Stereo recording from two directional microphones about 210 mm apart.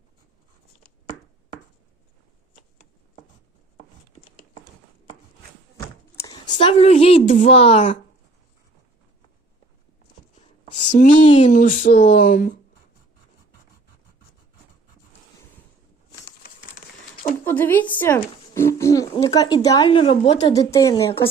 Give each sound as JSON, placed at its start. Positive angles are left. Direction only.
{"t": 6.2, "sound": "a sound", "side_deg": 20}
{"t": 6.5, "sound": "speech", "side_deg": 30}
{"t": 10.8, "sound": "speech", "side_deg": 35}
{"t": 17.4, "sound": "a sound", "side_deg": 10}
{"t": 18.0, "sound": "speech", "side_deg": 10}
{"t": 20.7, "sound": "speech", "side_deg": 15}